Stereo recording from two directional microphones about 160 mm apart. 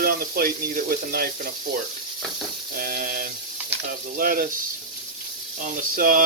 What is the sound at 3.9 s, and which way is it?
Speech, 65° right (ahead or behind).